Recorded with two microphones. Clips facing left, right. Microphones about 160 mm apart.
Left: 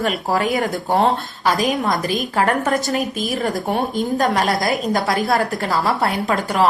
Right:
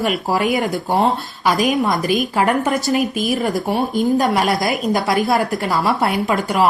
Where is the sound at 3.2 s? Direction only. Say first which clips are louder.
Right 3 dB; 5° right (ahead or behind).